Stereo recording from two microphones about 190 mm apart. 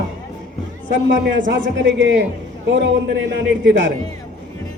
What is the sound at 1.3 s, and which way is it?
Speech, 75° right (ahead or behind).